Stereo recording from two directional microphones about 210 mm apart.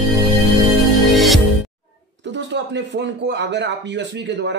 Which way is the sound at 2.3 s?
55° right (ahead or behind).